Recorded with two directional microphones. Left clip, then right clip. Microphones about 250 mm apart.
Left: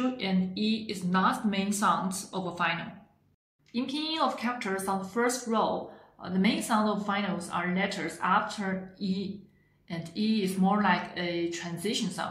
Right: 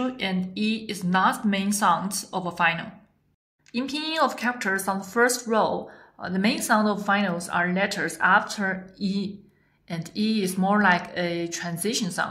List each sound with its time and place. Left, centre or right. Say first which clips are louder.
0.2 s speech: right 3 dB; right
3.7 s a woman's voice: right 5 dB; right